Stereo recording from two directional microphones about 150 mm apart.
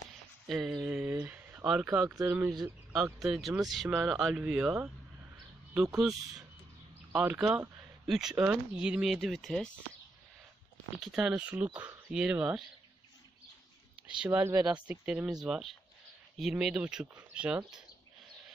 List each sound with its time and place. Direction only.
0.5 s speech: centre (ahead or behind)
0.8 s a sound: 10° right (ahead or behind)
2.0 s speech: 15° right (ahead or behind)
2.9 s speech: 5° right (ahead or behind)
11.0 s speech: 5° right (ahead or behind)
14.0 s speech: 5° right (ahead or behind)
14.4 s speech: 20° right (ahead or behind)
14.7 s speech: 10° right (ahead or behind)